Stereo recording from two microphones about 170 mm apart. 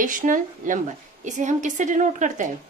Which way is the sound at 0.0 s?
50° right (ahead or behind).